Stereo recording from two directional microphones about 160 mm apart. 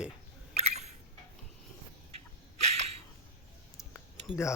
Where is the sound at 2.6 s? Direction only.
45° right (ahead or behind).